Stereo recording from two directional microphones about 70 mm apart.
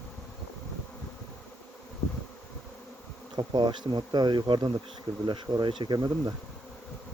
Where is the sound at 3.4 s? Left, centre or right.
Right.